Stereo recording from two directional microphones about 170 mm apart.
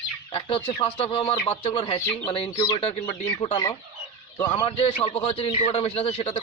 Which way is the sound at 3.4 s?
30° left (ahead or behind).